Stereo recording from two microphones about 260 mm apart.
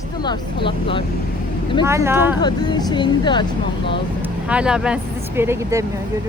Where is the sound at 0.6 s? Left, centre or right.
Centre.